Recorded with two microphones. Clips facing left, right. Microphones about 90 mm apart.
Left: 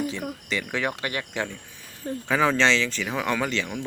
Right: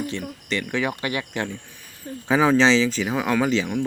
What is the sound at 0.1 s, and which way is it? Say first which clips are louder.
Speech: right 2 dB; 5° left (ahead or behind).